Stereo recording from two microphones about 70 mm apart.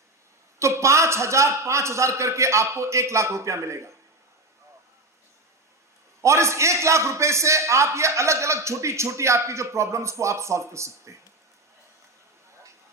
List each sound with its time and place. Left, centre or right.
0.6 s a man's voice: right
6.2 s a man's voice: right